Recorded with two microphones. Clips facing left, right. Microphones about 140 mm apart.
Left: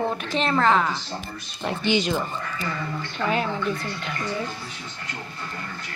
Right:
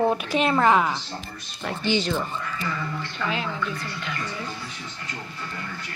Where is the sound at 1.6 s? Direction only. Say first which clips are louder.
Left 1 dB; 15° left (ahead or behind).